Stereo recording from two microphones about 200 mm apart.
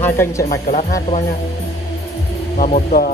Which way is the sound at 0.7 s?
35° left (ahead or behind).